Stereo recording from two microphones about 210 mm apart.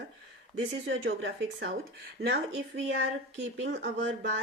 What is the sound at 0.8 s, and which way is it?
Speech, 60° right (ahead or behind).